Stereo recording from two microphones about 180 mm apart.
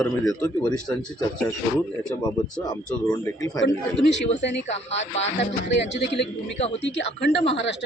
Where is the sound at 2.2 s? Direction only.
20° left (ahead or behind).